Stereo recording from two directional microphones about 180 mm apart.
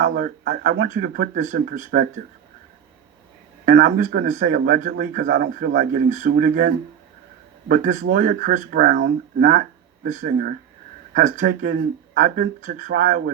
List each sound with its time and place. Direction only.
0.0 s a man's voice: 55° right (ahead or behind)
3.7 s a man's voice: 45° right (ahead or behind)